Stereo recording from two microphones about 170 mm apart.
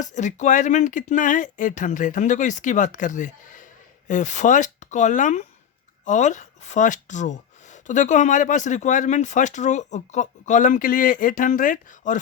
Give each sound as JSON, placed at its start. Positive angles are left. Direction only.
{"t": 0.0, "sound": "speech", "side_deg": 45}